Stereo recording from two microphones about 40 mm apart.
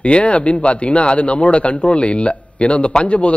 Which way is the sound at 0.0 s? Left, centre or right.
Left.